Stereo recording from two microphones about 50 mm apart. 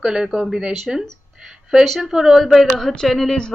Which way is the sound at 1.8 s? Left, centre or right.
Centre.